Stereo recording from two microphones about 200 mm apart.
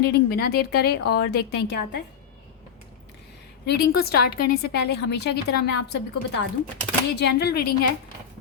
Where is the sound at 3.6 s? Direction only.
55° left (ahead or behind).